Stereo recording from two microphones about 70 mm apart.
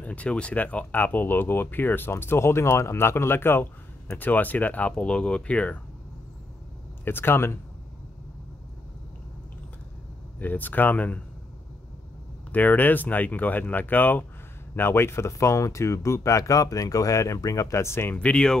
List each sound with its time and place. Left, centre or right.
0.0 s speech: left
7.1 s speech: left
10.4 s speech: left
12.5 s speech: left
18.1 s speech: centre